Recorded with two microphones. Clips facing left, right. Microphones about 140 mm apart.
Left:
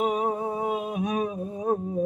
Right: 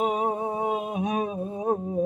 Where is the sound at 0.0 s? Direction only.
25° right (ahead or behind).